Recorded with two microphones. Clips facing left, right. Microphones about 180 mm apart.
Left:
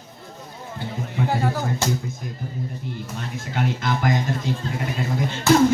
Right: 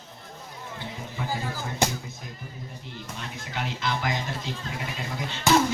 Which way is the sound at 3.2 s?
50° left (ahead or behind).